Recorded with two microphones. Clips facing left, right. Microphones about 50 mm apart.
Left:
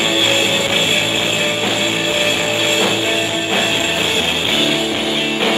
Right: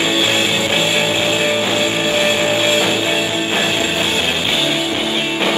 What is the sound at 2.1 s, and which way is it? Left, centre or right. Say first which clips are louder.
Music: right 2 dB; right.